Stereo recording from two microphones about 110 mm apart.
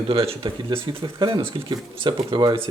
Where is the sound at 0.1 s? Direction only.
60° right (ahead or behind).